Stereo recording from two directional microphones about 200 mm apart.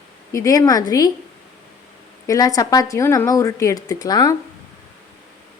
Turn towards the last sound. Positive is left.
turn(degrees=20)  # may be behind; listen again after turning